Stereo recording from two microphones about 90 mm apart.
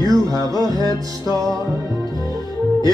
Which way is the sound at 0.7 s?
50° left (ahead or behind).